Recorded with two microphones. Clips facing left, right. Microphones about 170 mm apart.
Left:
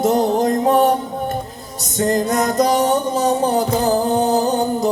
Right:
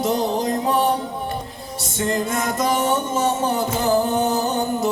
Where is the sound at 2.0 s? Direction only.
40° left (ahead or behind).